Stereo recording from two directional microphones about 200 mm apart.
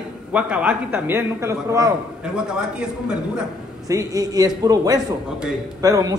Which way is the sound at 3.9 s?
15° right (ahead or behind).